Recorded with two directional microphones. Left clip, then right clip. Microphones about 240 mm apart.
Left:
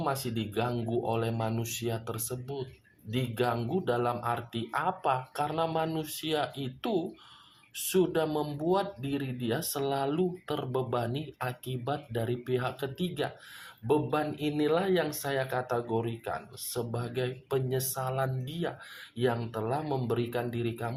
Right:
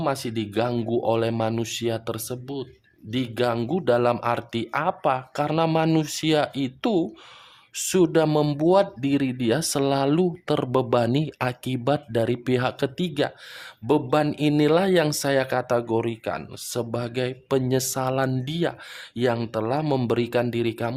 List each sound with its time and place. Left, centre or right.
0.0 s speech: right